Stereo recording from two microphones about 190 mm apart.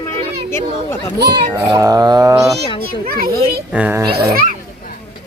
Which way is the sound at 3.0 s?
50° right (ahead or behind).